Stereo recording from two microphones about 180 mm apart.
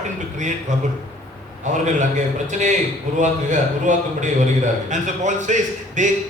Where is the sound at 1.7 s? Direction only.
40° right (ahead or behind).